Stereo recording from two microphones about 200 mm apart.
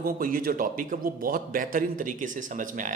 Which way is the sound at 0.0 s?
45° right (ahead or behind).